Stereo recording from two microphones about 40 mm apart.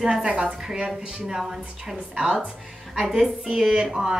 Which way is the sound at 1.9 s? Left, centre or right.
Right.